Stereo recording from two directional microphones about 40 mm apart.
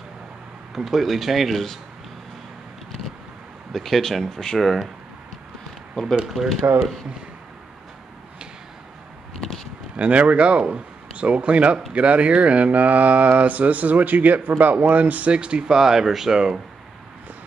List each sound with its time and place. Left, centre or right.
0.7 s speech: centre
3.7 s speech: centre
6.0 s speech: centre
6.7 s speech: right
9.9 s speech: right
15.3 s speech: right
15.7 s speech: centre